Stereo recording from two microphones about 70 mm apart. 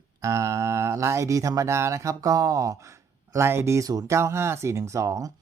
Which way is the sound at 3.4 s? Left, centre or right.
Right.